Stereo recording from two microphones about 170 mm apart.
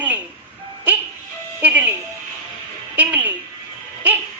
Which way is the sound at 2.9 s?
10° right (ahead or behind).